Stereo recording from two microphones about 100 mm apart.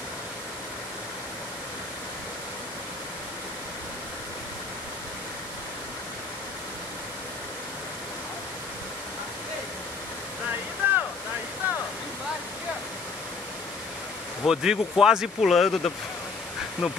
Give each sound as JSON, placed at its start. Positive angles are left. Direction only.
{"t": 10.8, "sound": "boat", "side_deg": -20}
{"t": 14.4, "sound": "speech", "side_deg": -5}